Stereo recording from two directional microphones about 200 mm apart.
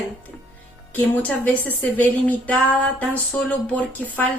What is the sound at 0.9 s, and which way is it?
Speech, 10° left (ahead or behind).